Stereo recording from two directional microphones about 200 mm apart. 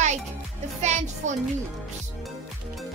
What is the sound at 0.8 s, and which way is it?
Music, 35° right (ahead or behind).